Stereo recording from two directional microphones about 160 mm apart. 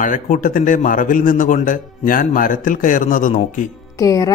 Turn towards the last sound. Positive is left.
turn(degrees=20)  # may be behind; listen again after turning